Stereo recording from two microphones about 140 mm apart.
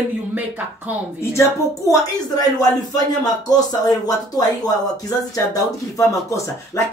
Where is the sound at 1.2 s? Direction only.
20° left (ahead or behind).